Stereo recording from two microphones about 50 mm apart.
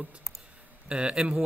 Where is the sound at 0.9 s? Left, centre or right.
Right.